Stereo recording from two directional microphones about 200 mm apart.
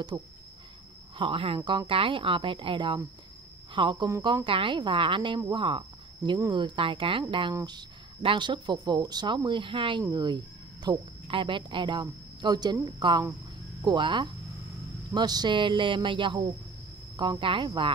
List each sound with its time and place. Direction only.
0.1 s speech: 15° right (ahead or behind)
1.1 s speech: 25° right (ahead or behind)